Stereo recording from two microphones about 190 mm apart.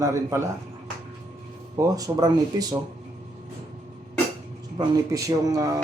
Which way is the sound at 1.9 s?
20° right (ahead or behind).